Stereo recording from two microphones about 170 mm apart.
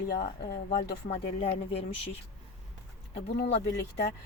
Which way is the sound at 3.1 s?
70° left (ahead or behind).